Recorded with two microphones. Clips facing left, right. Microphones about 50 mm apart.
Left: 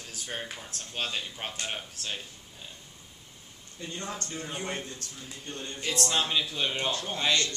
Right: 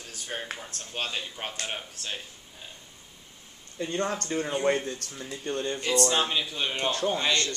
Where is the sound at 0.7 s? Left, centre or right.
Centre.